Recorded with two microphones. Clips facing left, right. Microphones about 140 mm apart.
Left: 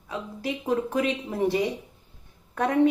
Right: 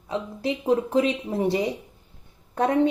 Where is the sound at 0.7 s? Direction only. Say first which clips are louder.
Right 4 dB; 30° right (ahead or behind).